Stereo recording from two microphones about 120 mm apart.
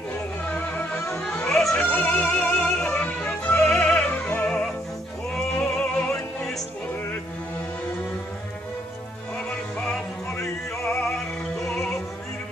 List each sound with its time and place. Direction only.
0.6 s music: 15° left (ahead or behind)
1.5 s music: 5° left (ahead or behind)
9.8 s music: 5° left (ahead or behind)
10.8 s music: 20° left (ahead or behind)
11.6 s music: 5° left (ahead or behind)